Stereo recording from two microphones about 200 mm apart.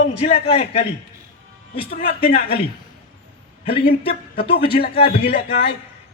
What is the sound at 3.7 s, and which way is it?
Speech, 55° left (ahead or behind).